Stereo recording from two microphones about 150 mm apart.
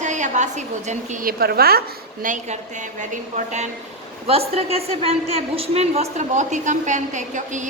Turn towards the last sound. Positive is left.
turn(degrees=-55)  # may be behind; listen again after turning